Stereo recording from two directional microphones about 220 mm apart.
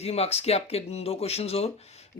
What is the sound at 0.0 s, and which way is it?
Speech, 30° left (ahead or behind).